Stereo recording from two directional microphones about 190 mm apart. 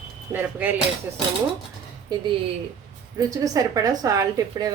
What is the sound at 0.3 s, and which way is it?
Speech, 10° right (ahead or behind).